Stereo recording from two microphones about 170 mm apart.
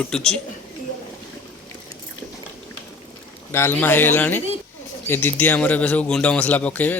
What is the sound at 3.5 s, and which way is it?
A man's voice, 10° left (ahead or behind).